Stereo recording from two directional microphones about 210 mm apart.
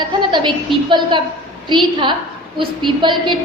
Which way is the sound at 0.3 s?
20° right (ahead or behind).